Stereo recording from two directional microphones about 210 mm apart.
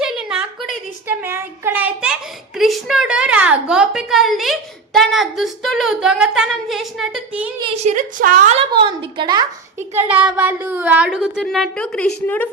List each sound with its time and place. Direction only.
0.0 s a sound: 5° right (ahead or behind)
1.0 s a woman's voice: 10° right (ahead or behind)
7.6 s a woman's voice: 30° right (ahead or behind)
8.8 s speech: 25° right (ahead or behind)
10.1 s a woman's voice: 5° right (ahead or behind)